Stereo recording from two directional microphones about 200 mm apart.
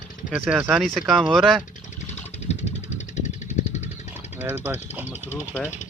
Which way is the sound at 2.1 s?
35° left (ahead or behind).